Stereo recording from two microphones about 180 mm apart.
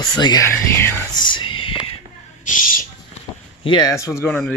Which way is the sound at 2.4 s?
50° left (ahead or behind).